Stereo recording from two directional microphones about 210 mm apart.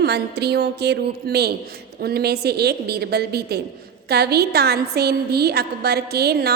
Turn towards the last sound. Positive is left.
turn(degrees=-50)  # may be behind; listen again after turning